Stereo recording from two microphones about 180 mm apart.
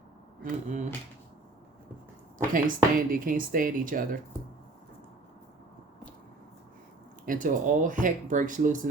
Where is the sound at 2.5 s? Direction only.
50° right (ahead or behind).